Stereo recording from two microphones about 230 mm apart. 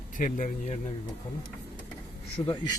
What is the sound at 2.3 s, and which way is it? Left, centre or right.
Speech, left.